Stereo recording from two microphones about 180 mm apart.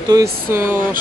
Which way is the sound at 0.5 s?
10° right (ahead or behind).